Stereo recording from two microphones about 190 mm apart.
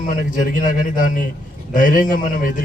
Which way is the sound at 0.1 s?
45° left (ahead or behind).